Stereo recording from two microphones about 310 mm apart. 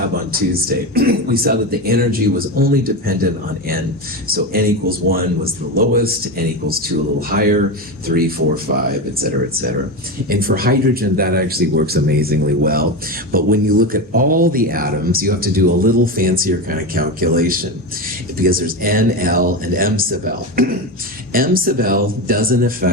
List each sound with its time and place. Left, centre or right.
0.3 s speech: right
4.3 s speech: right
8.9 s speech: right